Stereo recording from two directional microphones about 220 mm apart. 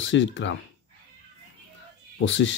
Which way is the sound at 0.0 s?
55° left (ahead or behind).